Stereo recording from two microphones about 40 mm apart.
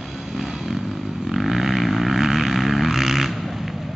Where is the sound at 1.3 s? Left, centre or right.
Centre.